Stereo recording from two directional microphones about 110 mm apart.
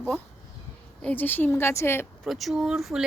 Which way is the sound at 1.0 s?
15° left (ahead or behind).